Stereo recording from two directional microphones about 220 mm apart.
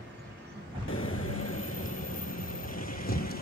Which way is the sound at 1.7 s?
40° left (ahead or behind).